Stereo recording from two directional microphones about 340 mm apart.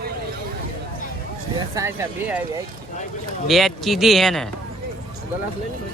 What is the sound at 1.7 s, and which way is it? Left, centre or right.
Speech, centre.